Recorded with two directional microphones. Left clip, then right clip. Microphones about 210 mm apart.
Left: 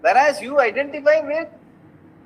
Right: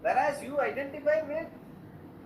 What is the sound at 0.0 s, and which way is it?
A man's voice, 45° left (ahead or behind).